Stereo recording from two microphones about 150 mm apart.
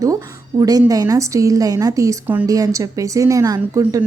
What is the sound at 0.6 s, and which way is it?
Speech, 25° right (ahead or behind).